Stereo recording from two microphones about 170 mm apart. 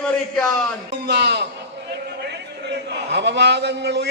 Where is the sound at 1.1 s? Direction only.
85° right.